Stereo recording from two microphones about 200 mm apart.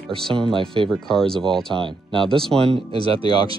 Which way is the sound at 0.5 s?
25° right (ahead or behind).